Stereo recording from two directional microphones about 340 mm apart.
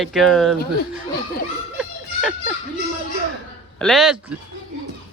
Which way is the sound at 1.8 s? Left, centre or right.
Centre.